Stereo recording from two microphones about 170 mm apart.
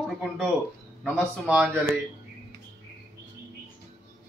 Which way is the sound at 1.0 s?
Centre (ahead or behind).